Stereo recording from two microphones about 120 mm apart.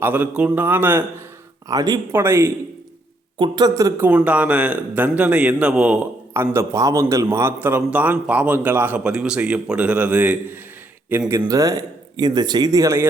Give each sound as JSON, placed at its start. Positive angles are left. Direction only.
{"t": 0.0, "sound": "a man's voice", "side_deg": -15}
{"t": 1.6, "sound": "speech", "side_deg": -35}
{"t": 2.1, "sound": "a man's voice", "side_deg": -20}
{"t": 3.3, "sound": "a man's voice", "side_deg": -40}
{"t": 6.3, "sound": "a man's voice", "side_deg": -20}
{"t": 11.3, "sound": "speech", "side_deg": -30}